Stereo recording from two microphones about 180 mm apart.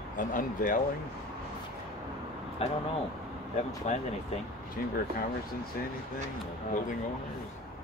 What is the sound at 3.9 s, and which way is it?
Speech, 40° left (ahead or behind).